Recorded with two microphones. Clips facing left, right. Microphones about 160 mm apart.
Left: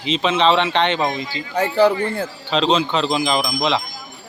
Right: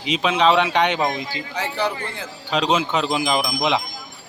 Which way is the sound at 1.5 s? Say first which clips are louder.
Left 10 dB; 50° left (ahead or behind).